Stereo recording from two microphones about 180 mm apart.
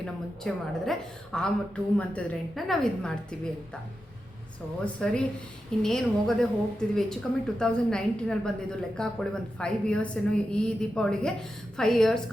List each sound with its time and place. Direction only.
0.0 s a woman's voice: 5° left (ahead or behind)
4.9 s a woman's voice: 5° left (ahead or behind)